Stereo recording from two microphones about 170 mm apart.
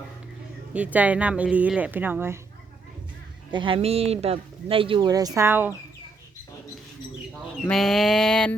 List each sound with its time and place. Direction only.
0.7 s speech: 10° right (ahead or behind)
3.5 s speech: 30° right (ahead or behind); by 5.7 s 10° right (ahead or behind)
7.6 s a sound: 5° left (ahead or behind)